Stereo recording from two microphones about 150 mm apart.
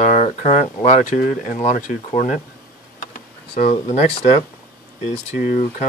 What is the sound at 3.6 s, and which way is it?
Speech, 45° left (ahead or behind).